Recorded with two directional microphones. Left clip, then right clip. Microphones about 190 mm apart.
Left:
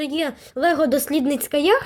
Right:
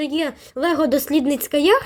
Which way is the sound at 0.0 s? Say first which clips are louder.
Right 1 dB; centre (ahead or behind).